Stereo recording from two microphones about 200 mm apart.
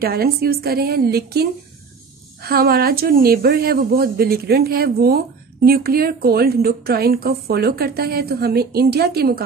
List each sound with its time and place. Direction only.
0.0 s speech: 50° right (ahead or behind)